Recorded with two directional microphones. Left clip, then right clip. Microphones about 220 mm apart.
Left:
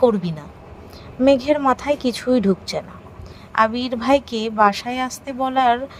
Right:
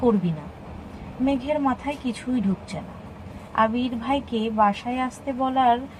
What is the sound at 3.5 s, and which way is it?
A woman's voice, 50° left (ahead or behind).